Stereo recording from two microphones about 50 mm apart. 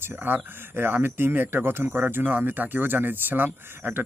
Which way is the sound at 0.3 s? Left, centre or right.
Right.